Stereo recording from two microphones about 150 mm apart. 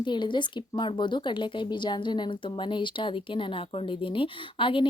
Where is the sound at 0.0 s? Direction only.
30° left (ahead or behind).